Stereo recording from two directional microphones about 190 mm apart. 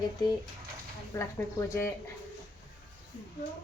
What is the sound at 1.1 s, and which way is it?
Speech, 10° left (ahead or behind).